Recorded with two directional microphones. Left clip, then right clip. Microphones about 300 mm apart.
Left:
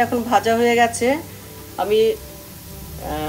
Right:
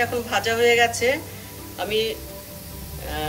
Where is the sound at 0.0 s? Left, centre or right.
Left.